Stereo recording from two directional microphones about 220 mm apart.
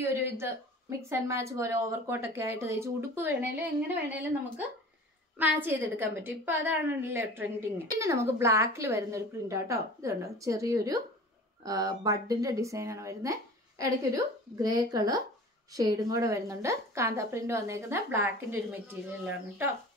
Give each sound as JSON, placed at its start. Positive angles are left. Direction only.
{"t": 0.0, "sound": "a woman's voice", "side_deg": -10}